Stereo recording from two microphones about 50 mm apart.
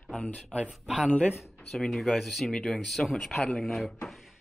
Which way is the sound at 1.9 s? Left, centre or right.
Centre.